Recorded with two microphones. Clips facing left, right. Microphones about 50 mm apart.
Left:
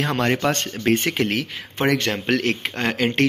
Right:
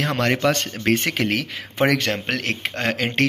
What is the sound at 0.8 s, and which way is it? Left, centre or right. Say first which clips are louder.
Speech: left 1 dB; right.